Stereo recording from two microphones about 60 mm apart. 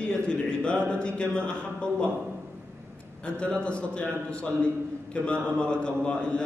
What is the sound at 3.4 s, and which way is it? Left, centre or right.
A man's voice, centre.